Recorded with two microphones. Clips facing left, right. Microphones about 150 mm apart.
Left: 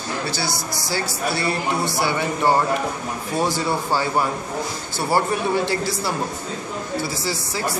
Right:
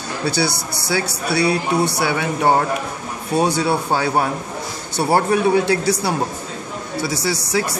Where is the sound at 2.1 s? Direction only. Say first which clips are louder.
Left 1 dB; 65° right (ahead or behind).